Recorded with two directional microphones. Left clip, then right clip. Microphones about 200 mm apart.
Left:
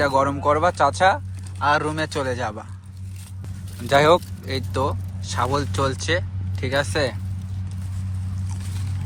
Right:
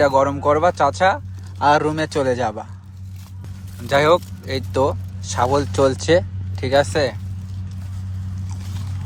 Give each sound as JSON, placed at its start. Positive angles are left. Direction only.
{"t": 0.0, "sound": "speech", "side_deg": -20}
{"t": 3.8, "sound": "speech", "side_deg": -15}